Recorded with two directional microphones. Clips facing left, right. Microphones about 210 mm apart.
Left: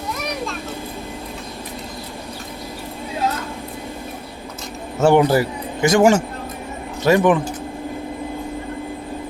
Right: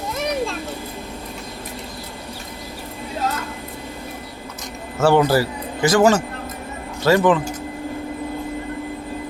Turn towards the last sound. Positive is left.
turn(degrees=15)  # may be behind; listen again after turning